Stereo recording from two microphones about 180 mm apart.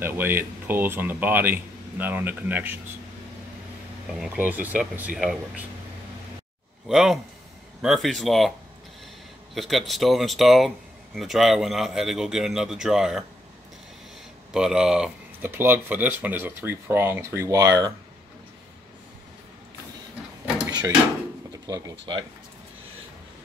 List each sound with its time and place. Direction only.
0.0 s speech: 10° right (ahead or behind)
4.1 s speech: 5° right (ahead or behind)
6.9 s a man's voice: centre (ahead or behind)
14.5 s speech: 5° right (ahead or behind); by 17.9 s 20° right (ahead or behind)
21.6 s speech: 20° right (ahead or behind)